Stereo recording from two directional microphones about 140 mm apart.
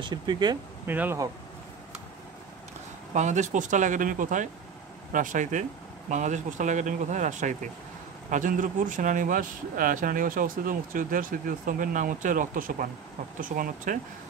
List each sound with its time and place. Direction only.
0.0 s speech: 30° right (ahead or behind)
0.8 s speech: 15° right (ahead or behind)
3.1 s speech: 60° right (ahead or behind); by 13.9 s 75° right (ahead or behind)